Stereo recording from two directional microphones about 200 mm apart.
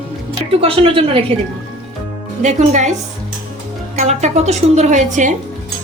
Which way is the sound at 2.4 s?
35° right (ahead or behind).